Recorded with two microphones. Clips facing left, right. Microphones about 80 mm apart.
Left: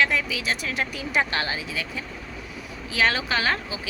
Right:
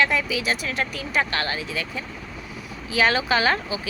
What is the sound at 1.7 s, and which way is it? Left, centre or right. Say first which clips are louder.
A woman's voice: right 2 dB; centre.